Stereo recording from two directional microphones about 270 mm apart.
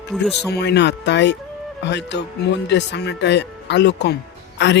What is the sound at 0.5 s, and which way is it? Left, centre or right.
Speech, left.